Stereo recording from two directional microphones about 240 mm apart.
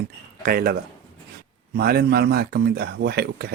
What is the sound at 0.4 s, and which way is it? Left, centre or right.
Speech, right.